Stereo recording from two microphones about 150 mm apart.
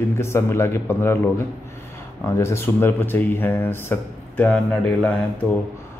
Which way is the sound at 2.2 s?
15° left (ahead or behind).